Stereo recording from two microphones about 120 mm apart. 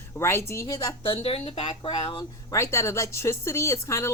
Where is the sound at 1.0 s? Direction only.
50° left (ahead or behind).